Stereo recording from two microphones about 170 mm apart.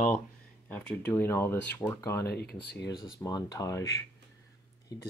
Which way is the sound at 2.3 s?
70° left (ahead or behind).